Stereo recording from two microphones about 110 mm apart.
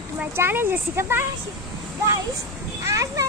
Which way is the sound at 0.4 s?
20° right (ahead or behind).